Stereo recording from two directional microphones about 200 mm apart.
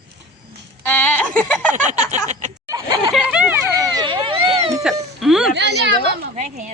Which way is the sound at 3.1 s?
5° right (ahead or behind).